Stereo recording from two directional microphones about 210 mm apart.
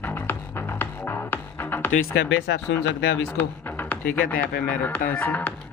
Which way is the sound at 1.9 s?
45° left (ahead or behind).